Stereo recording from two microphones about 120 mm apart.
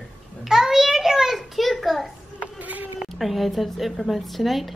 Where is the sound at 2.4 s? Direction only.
15° right (ahead or behind).